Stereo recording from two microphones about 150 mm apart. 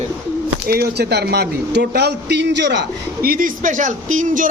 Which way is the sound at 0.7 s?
90° right.